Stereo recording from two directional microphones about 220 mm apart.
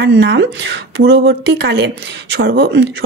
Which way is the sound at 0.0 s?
55° right (ahead or behind).